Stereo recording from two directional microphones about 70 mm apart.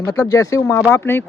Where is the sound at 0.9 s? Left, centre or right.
Left.